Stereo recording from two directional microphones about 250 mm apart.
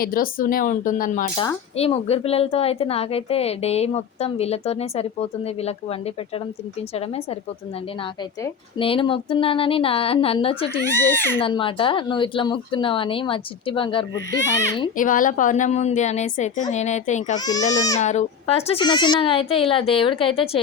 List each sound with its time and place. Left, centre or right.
0.0 s speech: left
1.4 s a woman's voice: left
8.8 s a woman's voice: left
10.8 s a child's voice: centre
11.3 s a woman's voice: left
14.9 s a woman's voice: left